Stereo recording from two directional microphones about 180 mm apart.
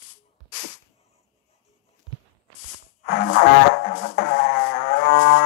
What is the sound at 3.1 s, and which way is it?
Music, 55° left (ahead or behind).